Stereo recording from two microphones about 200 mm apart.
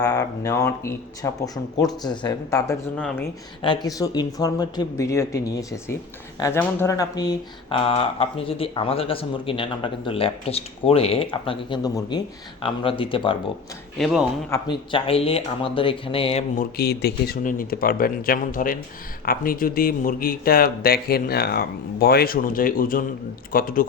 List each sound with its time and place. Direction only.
0.0 s speech: 15° left (ahead or behind)
14.0 s speech: centre (ahead or behind)
14.5 s speech: 25° left (ahead or behind)
16.6 s speech: 50° left (ahead or behind)